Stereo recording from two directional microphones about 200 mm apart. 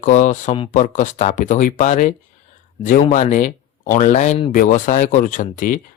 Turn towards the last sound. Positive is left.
turn(degrees=40)  # may be behind; listen again after turning